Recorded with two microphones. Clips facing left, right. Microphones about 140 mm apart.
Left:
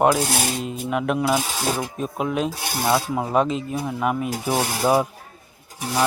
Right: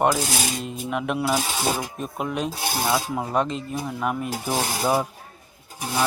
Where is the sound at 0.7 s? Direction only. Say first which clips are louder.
Left 3 dB; centre (ahead or behind).